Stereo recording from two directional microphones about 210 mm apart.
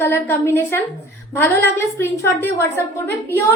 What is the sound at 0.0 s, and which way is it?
Speech, 10° left (ahead or behind).